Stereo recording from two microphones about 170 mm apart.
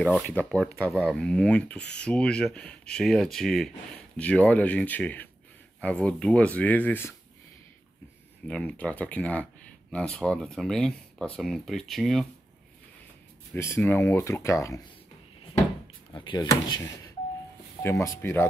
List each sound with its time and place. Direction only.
0.0 s speech: 5° left (ahead or behind)
8.5 s speech: 5° left (ahead or behind)
13.6 s speech: 15° left (ahead or behind)
16.1 s speech: 25° left (ahead or behind)